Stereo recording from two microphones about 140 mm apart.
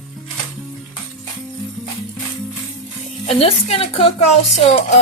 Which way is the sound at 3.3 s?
45° left (ahead or behind).